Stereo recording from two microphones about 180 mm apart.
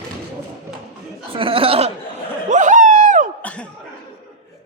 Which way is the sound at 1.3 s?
30° right (ahead or behind).